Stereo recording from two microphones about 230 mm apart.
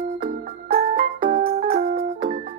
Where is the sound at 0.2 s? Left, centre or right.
Right.